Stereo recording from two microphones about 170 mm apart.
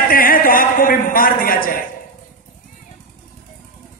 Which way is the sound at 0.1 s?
55° left (ahead or behind).